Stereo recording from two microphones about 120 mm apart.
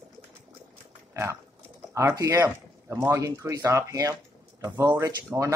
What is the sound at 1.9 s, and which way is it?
Speech, 25° right (ahead or behind).